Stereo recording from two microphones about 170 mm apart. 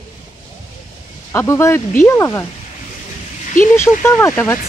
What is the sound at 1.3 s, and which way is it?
Speech, 15° left (ahead or behind).